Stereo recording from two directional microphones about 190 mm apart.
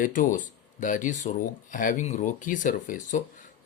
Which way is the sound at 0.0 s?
45° left (ahead or behind).